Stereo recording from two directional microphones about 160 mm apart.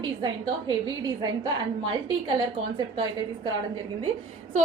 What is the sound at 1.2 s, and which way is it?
A woman's voice, 25° right (ahead or behind).